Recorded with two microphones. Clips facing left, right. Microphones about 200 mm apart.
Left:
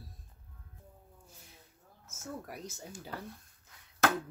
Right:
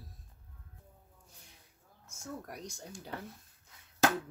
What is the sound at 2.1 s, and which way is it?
Speech, 5° left (ahead or behind).